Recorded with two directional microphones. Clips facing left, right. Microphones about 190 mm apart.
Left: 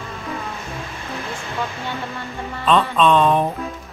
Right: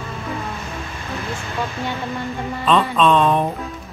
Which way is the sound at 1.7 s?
15° right (ahead or behind).